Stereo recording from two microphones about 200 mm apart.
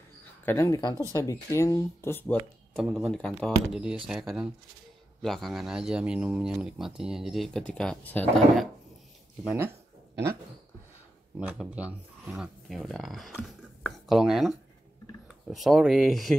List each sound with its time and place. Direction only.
0.5 s speech: 15° left (ahead or behind)
2.7 s speech: centre (ahead or behind)
11.3 s speech: 5° right (ahead or behind)